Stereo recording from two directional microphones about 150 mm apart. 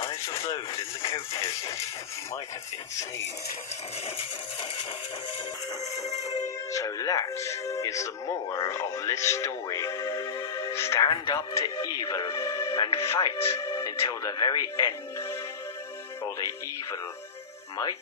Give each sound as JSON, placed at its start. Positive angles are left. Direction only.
{"t": 1.0, "sound": "speech", "side_deg": 20}
{"t": 5.8, "sound": "speech", "side_deg": 20}